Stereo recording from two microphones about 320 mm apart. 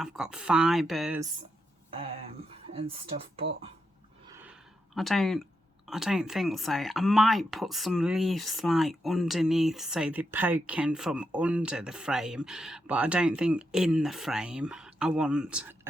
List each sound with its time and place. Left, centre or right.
0.0 s speech: centre
4.3 s a sound: centre
4.9 s speech: centre